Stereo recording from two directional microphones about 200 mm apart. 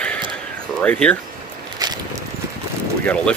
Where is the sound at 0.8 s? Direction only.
5° left (ahead or behind).